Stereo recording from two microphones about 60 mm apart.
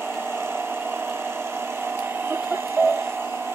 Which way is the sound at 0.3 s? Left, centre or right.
Right.